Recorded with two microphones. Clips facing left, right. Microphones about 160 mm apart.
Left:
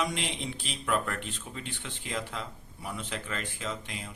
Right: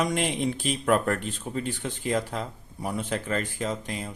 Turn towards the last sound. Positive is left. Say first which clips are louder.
# right 7 dB
turn(degrees=-40)  # may be behind; listen again after turning